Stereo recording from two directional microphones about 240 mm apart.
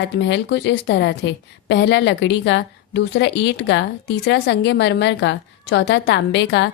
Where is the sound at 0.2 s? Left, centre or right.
Left.